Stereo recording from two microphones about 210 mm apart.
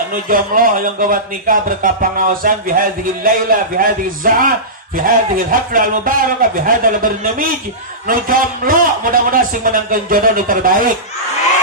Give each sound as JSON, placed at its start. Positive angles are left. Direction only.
{"t": 0.1, "sound": "speech", "side_deg": -40}